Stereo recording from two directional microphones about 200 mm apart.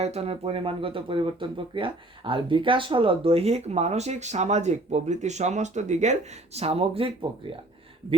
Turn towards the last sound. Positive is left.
turn(degrees=-30)  # may be behind; listen again after turning